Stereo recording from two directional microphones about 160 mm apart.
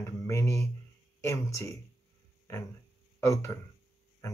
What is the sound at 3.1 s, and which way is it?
Speech, 15° left (ahead or behind).